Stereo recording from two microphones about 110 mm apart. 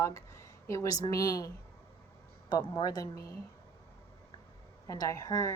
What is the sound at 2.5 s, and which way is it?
Speech, 40° left (ahead or behind).